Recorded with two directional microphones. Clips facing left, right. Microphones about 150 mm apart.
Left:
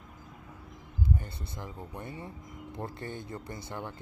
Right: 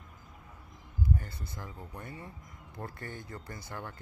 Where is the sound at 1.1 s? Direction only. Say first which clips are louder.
Left 1 dB; 25° left (ahead or behind).